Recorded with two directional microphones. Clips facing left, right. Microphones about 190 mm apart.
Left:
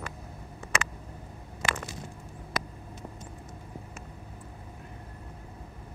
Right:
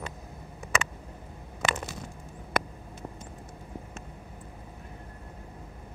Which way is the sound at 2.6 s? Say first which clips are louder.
Right 6 dB; 55° right (ahead or behind).